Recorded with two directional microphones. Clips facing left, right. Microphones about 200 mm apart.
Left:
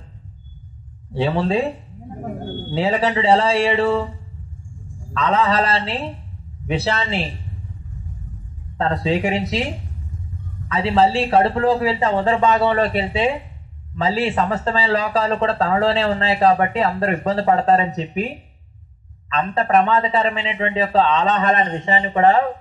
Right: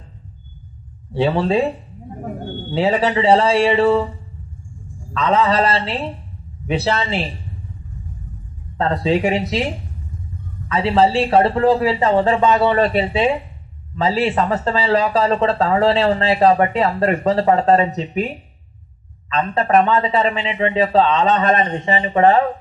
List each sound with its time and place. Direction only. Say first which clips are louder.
1.1 s speech: right 2 dB; 35° right (ahead or behind)
2.7 s speech: right 2 dB; 40° right (ahead or behind)
5.1 s speech: right 2 dB; 40° right (ahead or behind)
6.8 s speech: right 3 dB; 40° right (ahead or behind)
8.7 s speech: right 2 dB; 40° right (ahead or behind)
10.7 s speech: right 1 dB; 35° right (ahead or behind)
19.2 s speech: right 1 dB; 40° right (ahead or behind)